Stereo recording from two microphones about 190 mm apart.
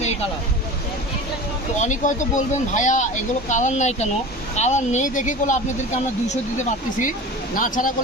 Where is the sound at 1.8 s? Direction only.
40° left (ahead or behind).